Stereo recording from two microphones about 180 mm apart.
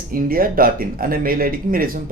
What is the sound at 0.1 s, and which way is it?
Speech, 55° right (ahead or behind).